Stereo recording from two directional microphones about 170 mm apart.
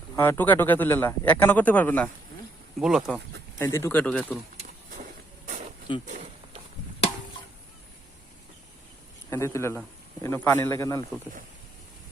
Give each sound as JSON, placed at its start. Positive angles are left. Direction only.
{"t": 0.2, "sound": "speech", "side_deg": 10}
{"t": 2.8, "sound": "speech", "side_deg": 0}
{"t": 3.6, "sound": "speech", "side_deg": 15}
{"t": 6.1, "sound": "walk", "side_deg": -45}
{"t": 9.3, "sound": "speech", "side_deg": 15}